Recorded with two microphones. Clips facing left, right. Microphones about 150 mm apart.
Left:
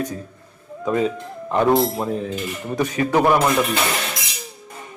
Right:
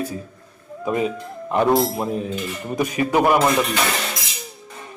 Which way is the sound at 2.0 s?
15° right (ahead or behind).